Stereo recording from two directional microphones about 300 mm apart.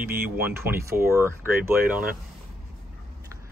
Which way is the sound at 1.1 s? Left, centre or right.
Centre.